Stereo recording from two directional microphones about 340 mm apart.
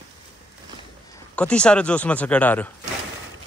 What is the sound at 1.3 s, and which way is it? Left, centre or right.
Speech, centre.